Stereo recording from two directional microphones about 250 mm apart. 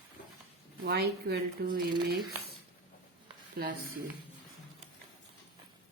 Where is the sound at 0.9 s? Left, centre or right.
Right.